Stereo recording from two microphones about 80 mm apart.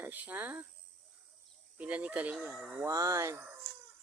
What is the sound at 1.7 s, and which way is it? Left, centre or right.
Speech, centre.